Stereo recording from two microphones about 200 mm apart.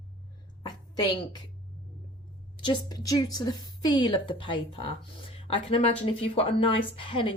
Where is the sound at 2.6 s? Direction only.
20° left (ahead or behind).